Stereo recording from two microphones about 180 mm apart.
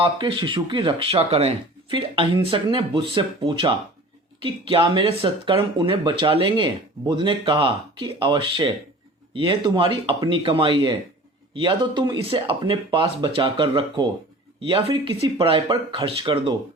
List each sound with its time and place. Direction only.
0.0 s speech: 30° right (ahead or behind)